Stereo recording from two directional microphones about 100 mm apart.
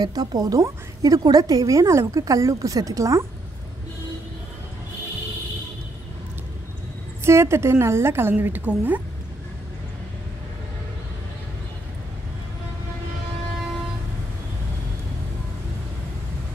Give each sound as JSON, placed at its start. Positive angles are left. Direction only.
{"t": 0.0, "sound": "a woman's voice", "side_deg": -40}
{"t": 7.2, "sound": "a woman's voice", "side_deg": -25}